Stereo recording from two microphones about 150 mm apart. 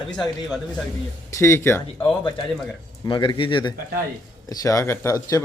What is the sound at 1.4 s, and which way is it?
Speech, 15° left (ahead or behind).